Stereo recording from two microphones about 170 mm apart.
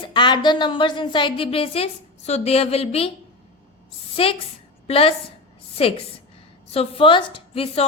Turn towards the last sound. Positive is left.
turn(degrees=35)  # may be behind; listen again after turning